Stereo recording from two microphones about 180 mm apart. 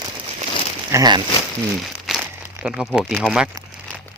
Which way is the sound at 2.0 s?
Centre (ahead or behind).